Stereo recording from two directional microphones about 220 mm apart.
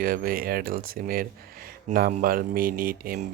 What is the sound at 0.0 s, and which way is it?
Speech, 40° right (ahead or behind).